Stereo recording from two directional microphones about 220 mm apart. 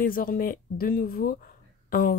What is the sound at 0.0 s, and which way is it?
Speech, 40° left (ahead or behind).